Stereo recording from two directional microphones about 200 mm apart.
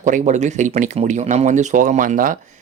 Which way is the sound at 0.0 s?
40° right (ahead or behind).